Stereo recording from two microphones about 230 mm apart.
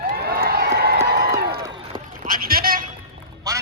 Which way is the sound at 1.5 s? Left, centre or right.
Right.